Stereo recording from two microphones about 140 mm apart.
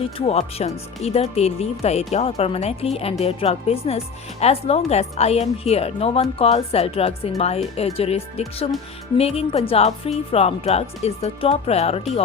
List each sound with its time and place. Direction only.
0.2 s speech: 45° left (ahead or behind)